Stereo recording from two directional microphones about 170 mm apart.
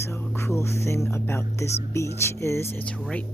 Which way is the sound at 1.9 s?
15° left (ahead or behind).